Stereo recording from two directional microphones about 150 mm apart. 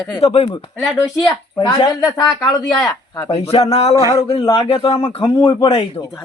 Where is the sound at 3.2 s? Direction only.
40° left (ahead or behind).